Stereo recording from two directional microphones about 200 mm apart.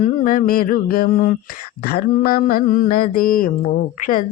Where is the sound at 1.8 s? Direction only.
50° left (ahead or behind).